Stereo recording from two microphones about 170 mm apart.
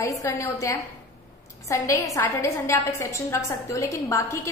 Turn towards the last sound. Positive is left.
turn(degrees=20)  # may be behind; listen again after turning